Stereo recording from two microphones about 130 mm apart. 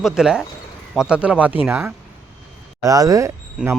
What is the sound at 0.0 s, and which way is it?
Speech, 5° right (ahead or behind).